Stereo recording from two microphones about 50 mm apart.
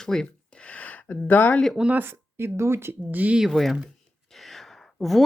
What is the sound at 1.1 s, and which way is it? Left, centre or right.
Speech, left.